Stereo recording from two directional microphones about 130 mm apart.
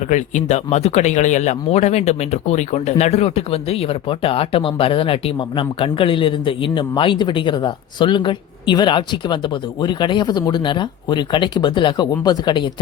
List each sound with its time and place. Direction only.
0.1 s speech: 65° left (ahead or behind); by 12.7 s 35° left (ahead or behind)